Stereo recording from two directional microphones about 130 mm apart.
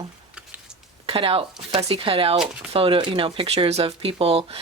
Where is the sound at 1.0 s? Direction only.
45° right (ahead or behind).